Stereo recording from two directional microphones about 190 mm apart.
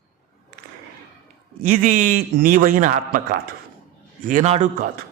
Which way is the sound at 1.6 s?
45° right (ahead or behind).